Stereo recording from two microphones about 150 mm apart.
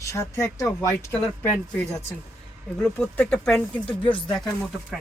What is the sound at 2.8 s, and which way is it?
Speech, 10° left (ahead or behind).